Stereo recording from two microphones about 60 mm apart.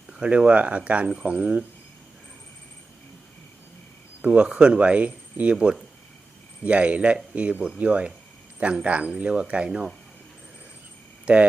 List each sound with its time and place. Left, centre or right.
0.1 s speech: centre
4.2 s speech: centre
11.3 s speech: centre